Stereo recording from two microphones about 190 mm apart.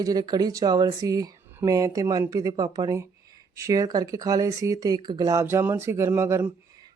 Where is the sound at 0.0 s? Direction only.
20° right (ahead or behind).